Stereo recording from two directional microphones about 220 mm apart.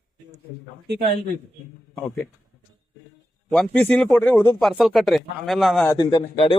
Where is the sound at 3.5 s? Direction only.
5° left (ahead or behind).